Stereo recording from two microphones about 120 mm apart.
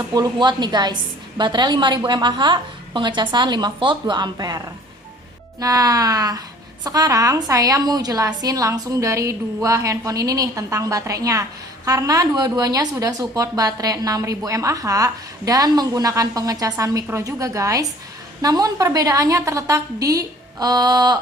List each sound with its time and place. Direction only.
0.1 s a woman's voice: 35° right (ahead or behind)